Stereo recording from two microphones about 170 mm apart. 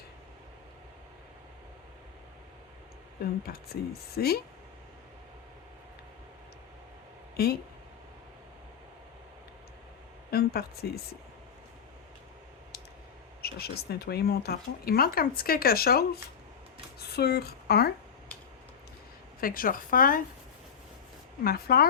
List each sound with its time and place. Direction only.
3.2 s speech: 65° left (ahead or behind)
7.4 s speech: 65° left (ahead or behind)
10.3 s speech: 65° left (ahead or behind)
13.4 s speech: 65° left (ahead or behind)
19.4 s speech: 55° left (ahead or behind)
21.4 s speech: 60° left (ahead or behind)